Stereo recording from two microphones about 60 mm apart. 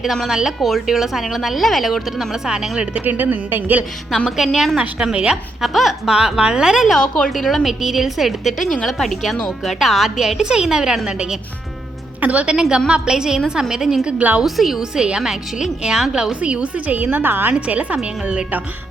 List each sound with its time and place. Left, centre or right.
0.0 s a woman's voice: centre
3.0 s speech: right
4.5 s a woman's voice: centre
4.8 s a woman's voice: centre
5.6 s a woman's voice: centre
6.8 s a woman's voice: centre
12.2 s a woman's voice: right
14.4 s a woman's voice: centre; by 17.5 s right
17.5 s speech: right